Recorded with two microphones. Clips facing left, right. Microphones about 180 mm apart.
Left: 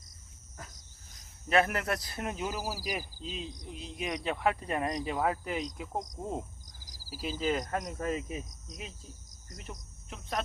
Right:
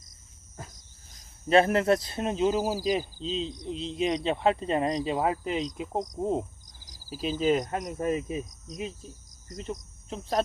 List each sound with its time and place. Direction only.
1.5 s speech: 30° right (ahead or behind)